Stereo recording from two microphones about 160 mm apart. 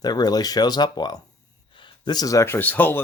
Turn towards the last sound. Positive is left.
turn(degrees=10)  # may be behind; listen again after turning